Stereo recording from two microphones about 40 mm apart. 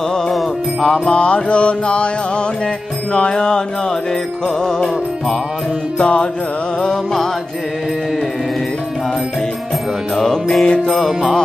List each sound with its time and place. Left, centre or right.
0.3 s music: centre
1.1 s music: left
3.1 s music: left
5.9 s music: left
10.1 s music: centre